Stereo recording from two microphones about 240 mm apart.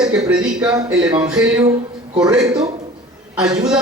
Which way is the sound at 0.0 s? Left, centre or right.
Centre.